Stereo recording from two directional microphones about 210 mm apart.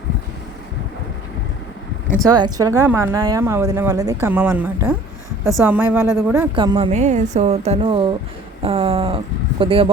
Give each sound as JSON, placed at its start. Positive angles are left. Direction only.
{"t": 2.2, "sound": "speech", "side_deg": -20}
{"t": 6.6, "sound": "a woman's voice", "side_deg": -25}